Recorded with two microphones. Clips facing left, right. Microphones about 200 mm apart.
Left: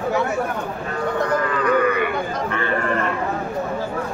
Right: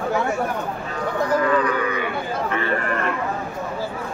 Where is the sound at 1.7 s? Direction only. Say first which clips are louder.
Left 5 dB; 60° left (ahead or behind).